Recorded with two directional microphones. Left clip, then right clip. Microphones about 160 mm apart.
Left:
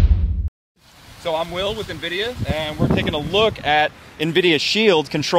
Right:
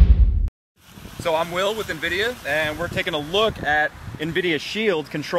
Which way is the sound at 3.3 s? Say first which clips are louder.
Left 4 dB; 35° left (ahead or behind).